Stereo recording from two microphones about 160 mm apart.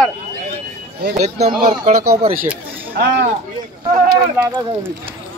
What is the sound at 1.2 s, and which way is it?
Speech, 45° right (ahead or behind).